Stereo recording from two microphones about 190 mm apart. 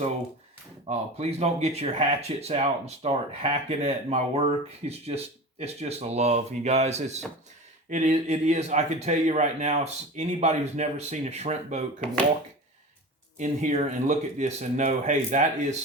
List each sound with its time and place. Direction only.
0.9 s speech: 35° right (ahead or behind)
13.4 s speech: 40° right (ahead or behind)